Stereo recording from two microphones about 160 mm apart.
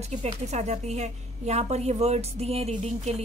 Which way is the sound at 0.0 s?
45° right (ahead or behind).